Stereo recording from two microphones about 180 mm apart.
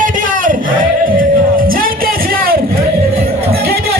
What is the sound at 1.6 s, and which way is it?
Music, 55° right (ahead or behind).